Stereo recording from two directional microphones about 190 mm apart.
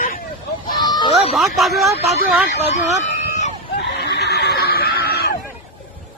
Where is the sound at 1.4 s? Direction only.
Centre (ahead or behind).